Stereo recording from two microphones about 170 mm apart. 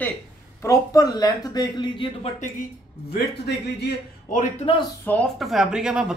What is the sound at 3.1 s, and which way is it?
Speech, 75° left (ahead or behind).